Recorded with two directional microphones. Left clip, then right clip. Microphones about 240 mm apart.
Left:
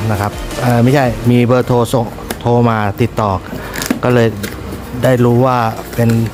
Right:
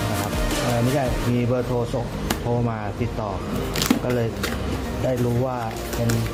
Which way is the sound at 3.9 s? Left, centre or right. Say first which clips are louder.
Left 5 dB; centre.